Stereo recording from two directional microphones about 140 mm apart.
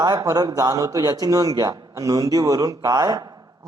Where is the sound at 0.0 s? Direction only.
30° right (ahead or behind).